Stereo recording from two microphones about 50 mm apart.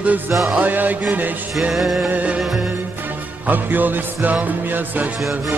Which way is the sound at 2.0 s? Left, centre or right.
Right.